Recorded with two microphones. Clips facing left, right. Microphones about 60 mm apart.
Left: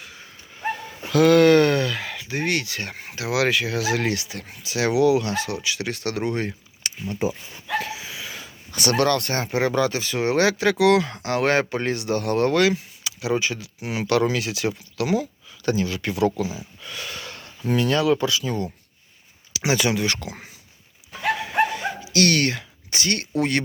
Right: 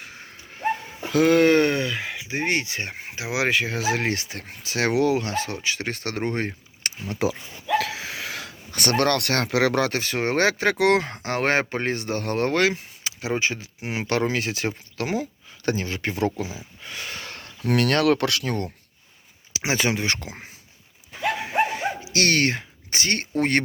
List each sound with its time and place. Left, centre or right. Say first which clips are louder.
0.0 s dog: right 1 dB; right
0.9 s speech: left 3 dB; right
7.8 s a sound: right 2 dB; right
8.7 s speech: left 1 dB; right
9.2 s speech: right 2 dB; right
17.7 s speech: even; right
19.5 s speech: left 2 dB; right
21.4 s dog: even; right